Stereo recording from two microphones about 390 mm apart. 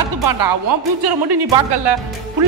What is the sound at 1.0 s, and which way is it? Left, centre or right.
Speech, right.